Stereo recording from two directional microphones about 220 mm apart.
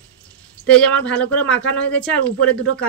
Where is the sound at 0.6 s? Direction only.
5° left (ahead or behind).